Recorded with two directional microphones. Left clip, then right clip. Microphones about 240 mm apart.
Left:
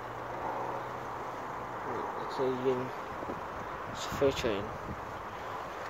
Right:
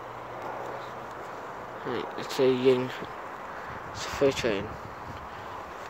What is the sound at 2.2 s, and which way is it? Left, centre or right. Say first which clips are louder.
Speech: right 9 dB; right.